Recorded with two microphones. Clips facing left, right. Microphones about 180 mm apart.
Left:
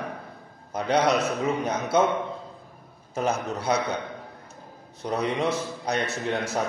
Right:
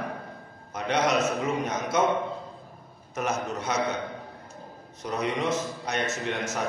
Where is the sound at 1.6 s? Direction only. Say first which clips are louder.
Left 4 dB; 30° left (ahead or behind).